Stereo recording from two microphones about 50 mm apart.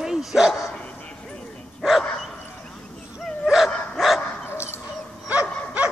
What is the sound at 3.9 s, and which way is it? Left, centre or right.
Dog, centre.